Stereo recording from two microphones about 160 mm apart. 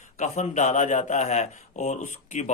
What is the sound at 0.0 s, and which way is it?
Speech, 45° left (ahead or behind).